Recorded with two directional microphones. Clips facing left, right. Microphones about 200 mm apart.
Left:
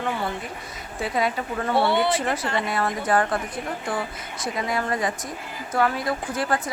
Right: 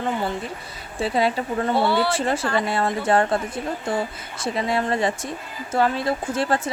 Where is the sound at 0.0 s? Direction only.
30° right (ahead or behind).